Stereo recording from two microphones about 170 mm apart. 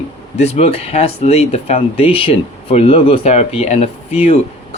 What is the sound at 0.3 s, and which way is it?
Speech, 40° left (ahead or behind).